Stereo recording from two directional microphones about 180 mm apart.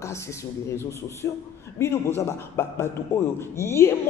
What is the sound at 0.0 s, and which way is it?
A man's voice, 15° left (ahead or behind).